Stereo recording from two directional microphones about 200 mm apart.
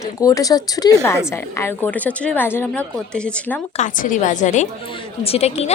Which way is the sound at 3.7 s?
40° left (ahead or behind).